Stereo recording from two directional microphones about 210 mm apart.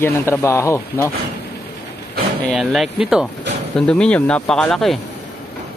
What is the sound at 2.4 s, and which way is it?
Speech, centre (ahead or behind).